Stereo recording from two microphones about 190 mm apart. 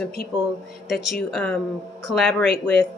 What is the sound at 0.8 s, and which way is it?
A woman's voice, centre (ahead or behind).